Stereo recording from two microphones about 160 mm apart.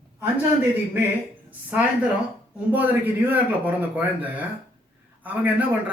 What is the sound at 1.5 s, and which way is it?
Speech, 10° right (ahead or behind).